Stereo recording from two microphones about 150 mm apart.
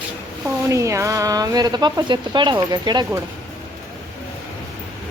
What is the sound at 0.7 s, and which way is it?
Speech, 20° right (ahead or behind).